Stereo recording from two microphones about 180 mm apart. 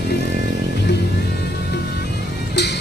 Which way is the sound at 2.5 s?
70° left (ahead or behind).